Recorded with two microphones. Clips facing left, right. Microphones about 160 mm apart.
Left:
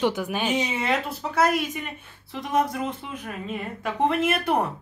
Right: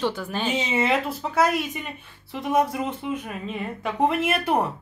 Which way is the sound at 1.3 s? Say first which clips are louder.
Even; centre (ahead or behind).